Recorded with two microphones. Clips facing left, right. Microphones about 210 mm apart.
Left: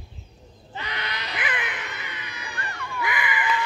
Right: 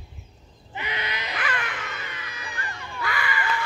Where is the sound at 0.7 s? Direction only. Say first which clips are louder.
Right 1 dB; 10° right (ahead or behind).